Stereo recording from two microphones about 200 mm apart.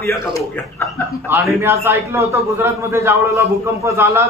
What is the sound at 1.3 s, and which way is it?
Speech, 10° right (ahead or behind).